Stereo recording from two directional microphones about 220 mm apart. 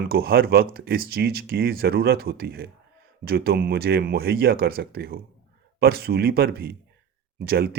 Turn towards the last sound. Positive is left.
turn(degrees=-45)  # may be behind; listen again after turning